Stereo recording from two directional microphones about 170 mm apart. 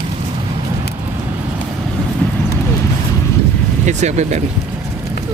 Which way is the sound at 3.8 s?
45° right (ahead or behind).